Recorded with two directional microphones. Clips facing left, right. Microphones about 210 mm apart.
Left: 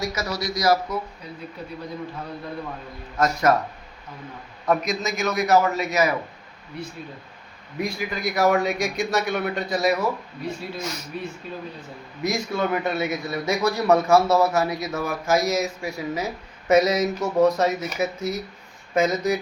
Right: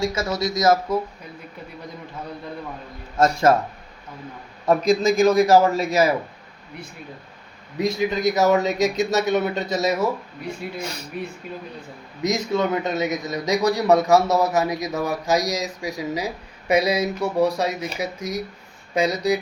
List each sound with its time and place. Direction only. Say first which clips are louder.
0.0 s a man's voice: right 4 dB; 30° right (ahead or behind)
3.2 s a man's voice: right 3 dB; 25° right (ahead or behind)
4.6 s a man's voice: right 6 dB; 30° right (ahead or behind)
7.8 s a man's voice: right 6 dB; 20° right (ahead or behind)
12.2 s a man's voice: right 3 dB; 20° right (ahead or behind)